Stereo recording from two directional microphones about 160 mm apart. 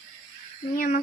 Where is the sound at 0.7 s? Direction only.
60° left (ahead or behind).